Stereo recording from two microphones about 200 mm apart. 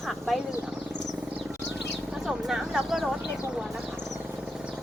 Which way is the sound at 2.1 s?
5° right (ahead or behind).